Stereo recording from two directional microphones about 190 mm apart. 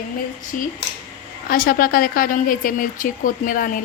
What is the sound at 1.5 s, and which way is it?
Speech, 50° left (ahead or behind).